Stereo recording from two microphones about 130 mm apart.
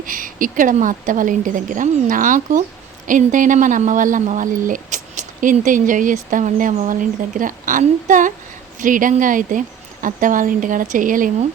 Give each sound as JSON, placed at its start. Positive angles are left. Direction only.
{"t": 0.0, "sound": "a woman's voice", "side_deg": -90}